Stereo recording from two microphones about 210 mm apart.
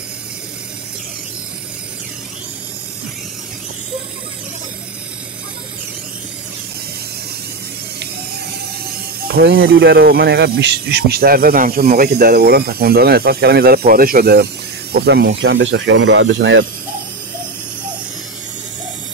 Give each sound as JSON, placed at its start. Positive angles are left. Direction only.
{"t": 9.2, "sound": "speech", "side_deg": -45}